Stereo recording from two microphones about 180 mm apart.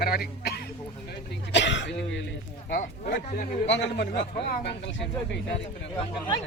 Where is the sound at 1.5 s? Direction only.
85° left.